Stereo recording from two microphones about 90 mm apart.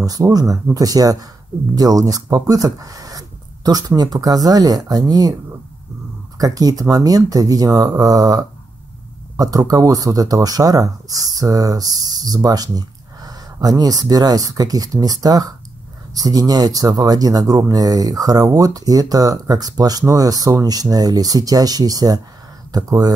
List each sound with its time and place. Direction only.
0.0 s speech: 45° right (ahead or behind)
6.3 s speech: 45° right (ahead or behind)